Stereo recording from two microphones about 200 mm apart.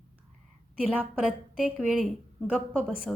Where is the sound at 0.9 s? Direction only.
5° right (ahead or behind).